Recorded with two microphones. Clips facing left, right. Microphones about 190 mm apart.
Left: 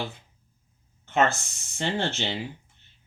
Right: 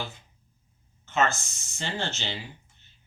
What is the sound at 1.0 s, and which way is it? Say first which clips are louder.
Speech: left 3 dB; 60° left (ahead or behind).